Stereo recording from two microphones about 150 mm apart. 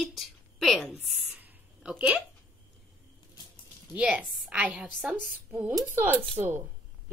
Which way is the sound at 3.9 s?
10° right (ahead or behind).